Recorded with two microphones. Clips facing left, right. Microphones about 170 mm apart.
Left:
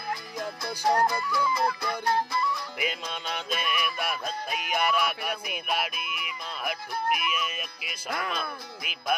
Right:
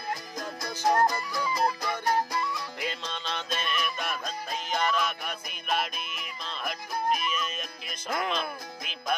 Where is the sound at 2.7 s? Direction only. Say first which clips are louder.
Left 2 dB; 10° left (ahead or behind).